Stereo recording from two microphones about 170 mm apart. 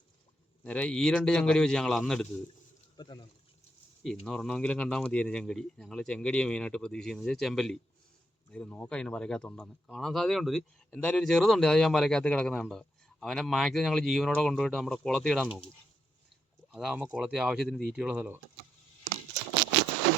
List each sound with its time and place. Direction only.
0.6 s speech: 5° left (ahead or behind)
3.0 s speech: 25° left (ahead or behind)
4.0 s speech: 5° left (ahead or behind)
16.7 s speech: 5° right (ahead or behind)